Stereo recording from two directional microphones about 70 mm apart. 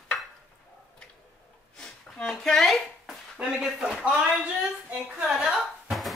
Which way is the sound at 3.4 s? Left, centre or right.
Centre.